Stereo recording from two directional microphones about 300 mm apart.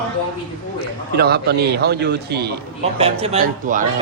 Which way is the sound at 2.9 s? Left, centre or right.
Centre.